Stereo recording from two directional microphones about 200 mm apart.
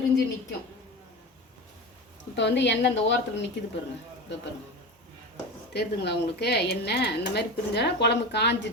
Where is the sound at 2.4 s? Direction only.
60° left (ahead or behind).